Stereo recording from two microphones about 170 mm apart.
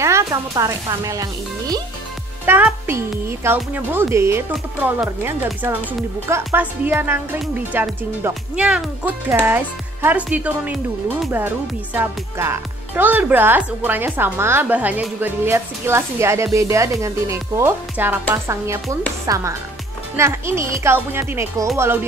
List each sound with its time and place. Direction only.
0.0 s a child's voice: 15° right (ahead or behind)